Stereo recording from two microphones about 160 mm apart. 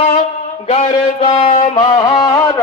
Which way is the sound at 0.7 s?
45° left (ahead or behind).